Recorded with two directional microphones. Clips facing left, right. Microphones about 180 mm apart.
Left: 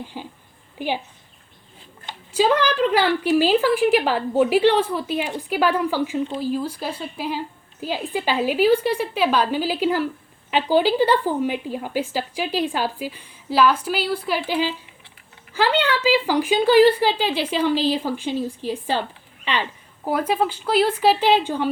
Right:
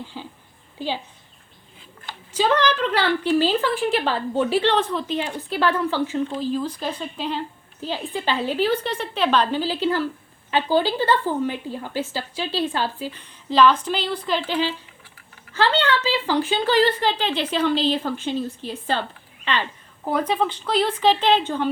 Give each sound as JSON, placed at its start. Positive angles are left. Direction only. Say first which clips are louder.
{"t": 0.0, "sound": "speech", "louder": "left 2 dB", "side_deg": 15}
{"t": 2.0, "sound": "speech", "louder": "left 2 dB", "side_deg": 10}
{"t": 20.1, "sound": "speech", "louder": "left 1 dB", "side_deg": 5}